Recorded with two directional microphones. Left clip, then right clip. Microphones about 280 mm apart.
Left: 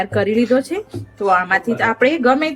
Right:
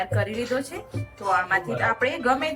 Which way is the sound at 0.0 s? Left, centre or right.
Left.